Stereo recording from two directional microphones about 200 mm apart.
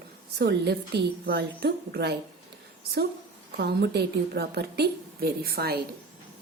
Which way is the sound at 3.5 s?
55° right (ahead or behind).